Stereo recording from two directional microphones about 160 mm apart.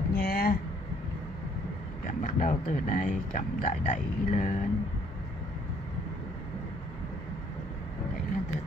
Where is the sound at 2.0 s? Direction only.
55° left (ahead or behind).